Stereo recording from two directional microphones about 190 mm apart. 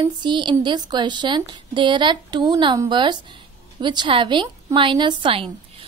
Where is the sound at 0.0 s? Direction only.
25° right (ahead or behind).